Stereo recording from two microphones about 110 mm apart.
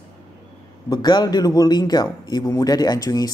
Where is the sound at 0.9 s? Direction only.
40° left (ahead or behind).